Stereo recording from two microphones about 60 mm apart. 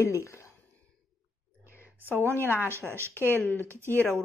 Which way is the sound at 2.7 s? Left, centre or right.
Right.